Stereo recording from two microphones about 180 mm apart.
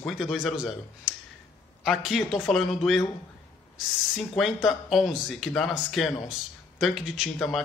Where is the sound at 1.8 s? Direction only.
Centre (ahead or behind).